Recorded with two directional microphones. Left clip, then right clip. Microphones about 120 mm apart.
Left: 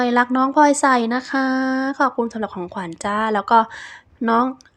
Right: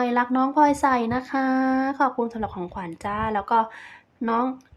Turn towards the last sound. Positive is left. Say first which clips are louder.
# left 6 dB
turn(degrees=40)  # may be behind; listen again after turning